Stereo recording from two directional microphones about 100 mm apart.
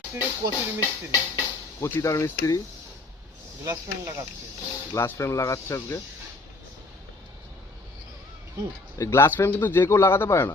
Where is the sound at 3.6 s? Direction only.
30° right (ahead or behind).